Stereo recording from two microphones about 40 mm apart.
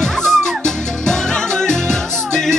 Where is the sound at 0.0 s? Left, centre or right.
Centre.